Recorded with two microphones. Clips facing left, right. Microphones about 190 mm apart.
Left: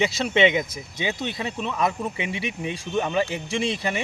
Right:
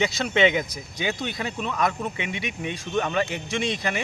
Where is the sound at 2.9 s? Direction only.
5° left (ahead or behind).